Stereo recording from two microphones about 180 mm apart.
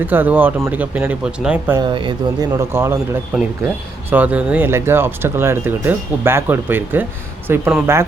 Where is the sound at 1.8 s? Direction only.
25° right (ahead or behind).